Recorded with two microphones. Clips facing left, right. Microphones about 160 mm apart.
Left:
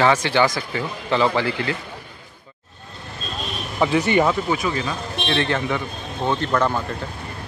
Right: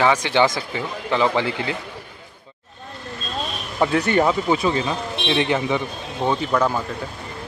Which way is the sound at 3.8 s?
Centre (ahead or behind).